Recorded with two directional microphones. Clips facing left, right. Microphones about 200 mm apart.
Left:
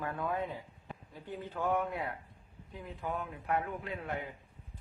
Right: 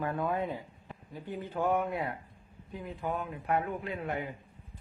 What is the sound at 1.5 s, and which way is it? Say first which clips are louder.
Speech: right 3 dB; 15° right (ahead or behind).